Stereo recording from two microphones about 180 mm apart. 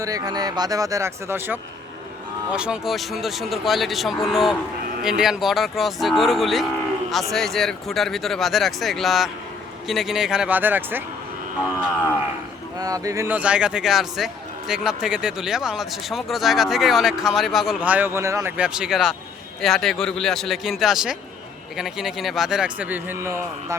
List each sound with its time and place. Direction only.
0.0 s speech: 20° right (ahead or behind)
12.8 s speech: 20° right (ahead or behind)